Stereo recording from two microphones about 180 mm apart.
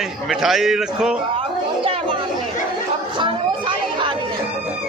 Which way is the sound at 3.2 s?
25° right (ahead or behind).